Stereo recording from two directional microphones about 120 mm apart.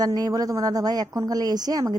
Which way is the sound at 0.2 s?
30° right (ahead or behind).